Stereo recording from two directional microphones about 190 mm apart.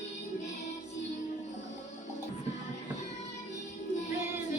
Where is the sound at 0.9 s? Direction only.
35° left (ahead or behind).